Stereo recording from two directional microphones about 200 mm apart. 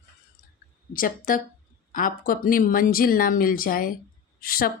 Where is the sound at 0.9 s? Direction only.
45° left (ahead or behind).